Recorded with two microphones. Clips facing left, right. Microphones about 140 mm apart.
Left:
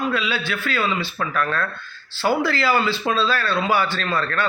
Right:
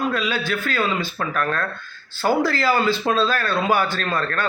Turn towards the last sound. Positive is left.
turn(degrees=-45)  # may be behind; listen again after turning